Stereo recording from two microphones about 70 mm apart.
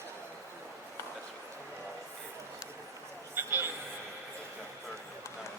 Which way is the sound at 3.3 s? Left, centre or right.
Right.